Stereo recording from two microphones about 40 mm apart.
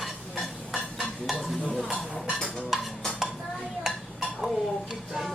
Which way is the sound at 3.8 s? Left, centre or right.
Centre.